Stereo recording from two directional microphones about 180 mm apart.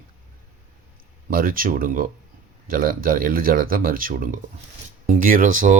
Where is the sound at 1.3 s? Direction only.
50° right (ahead or behind).